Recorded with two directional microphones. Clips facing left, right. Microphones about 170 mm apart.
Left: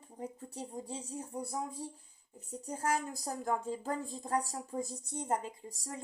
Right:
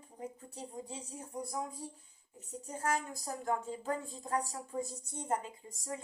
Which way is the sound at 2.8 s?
35° left (ahead or behind).